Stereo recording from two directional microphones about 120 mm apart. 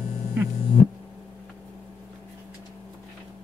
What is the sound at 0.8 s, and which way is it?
Music, 60° left (ahead or behind).